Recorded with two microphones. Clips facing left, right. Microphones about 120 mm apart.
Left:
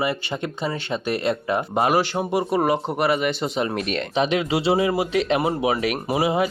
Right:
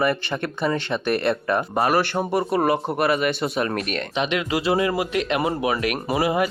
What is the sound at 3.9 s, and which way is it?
Speech, 35° left (ahead or behind).